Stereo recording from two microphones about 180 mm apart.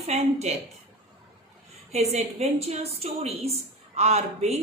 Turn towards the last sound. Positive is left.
turn(degrees=-35)  # may be behind; listen again after turning